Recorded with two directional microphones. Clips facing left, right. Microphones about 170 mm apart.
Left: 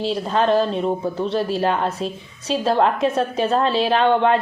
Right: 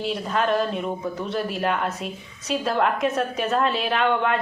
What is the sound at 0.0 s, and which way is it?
A man's voice, 30° left (ahead or behind).